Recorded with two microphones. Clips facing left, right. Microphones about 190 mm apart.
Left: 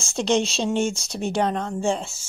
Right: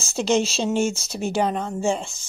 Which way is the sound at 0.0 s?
5° right (ahead or behind).